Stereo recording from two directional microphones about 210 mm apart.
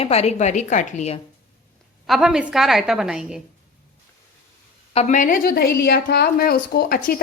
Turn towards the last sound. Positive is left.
turn(degrees=40)  # may be behind; listen again after turning